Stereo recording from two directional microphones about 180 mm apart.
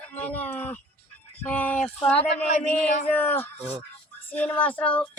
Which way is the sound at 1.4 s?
10° left (ahead or behind).